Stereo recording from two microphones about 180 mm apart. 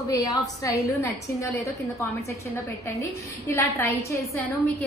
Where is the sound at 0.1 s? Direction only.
20° left (ahead or behind).